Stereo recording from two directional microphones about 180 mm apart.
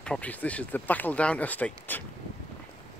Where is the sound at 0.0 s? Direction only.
5° left (ahead or behind).